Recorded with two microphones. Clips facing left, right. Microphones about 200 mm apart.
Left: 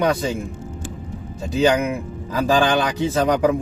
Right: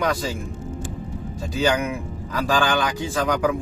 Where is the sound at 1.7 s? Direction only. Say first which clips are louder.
Left 3 dB; 20° left (ahead or behind).